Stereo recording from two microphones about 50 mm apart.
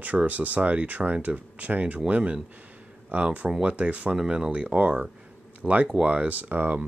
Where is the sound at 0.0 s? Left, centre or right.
Right.